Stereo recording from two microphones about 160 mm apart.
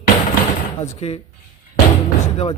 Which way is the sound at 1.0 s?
40° left (ahead or behind).